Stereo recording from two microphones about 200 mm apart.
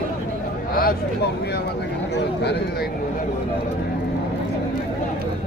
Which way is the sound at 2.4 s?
55° left (ahead or behind).